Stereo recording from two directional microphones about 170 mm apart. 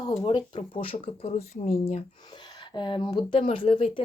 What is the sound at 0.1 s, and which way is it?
Speech, 35° left (ahead or behind).